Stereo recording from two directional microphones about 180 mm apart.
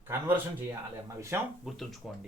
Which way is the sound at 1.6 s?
Centre (ahead or behind).